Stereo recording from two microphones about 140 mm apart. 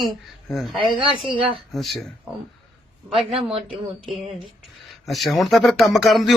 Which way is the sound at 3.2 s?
45° right (ahead or behind).